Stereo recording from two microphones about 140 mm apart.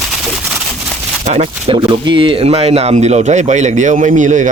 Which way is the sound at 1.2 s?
45° right (ahead or behind).